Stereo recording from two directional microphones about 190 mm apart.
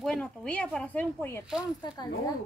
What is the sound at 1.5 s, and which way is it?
Speech, 5° right (ahead or behind).